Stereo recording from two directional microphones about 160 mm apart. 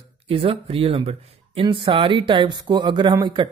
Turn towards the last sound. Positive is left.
turn(degrees=-25)  # may be behind; listen again after turning